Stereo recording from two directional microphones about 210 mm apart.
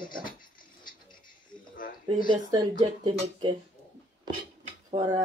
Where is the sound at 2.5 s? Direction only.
20° right (ahead or behind).